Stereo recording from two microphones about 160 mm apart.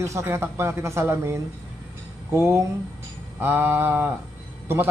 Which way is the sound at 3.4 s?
15° right (ahead or behind).